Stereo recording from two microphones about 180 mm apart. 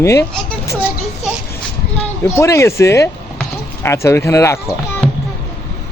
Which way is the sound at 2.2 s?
15° left (ahead or behind).